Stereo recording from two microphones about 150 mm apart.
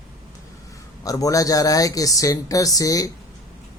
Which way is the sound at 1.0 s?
20° left (ahead or behind).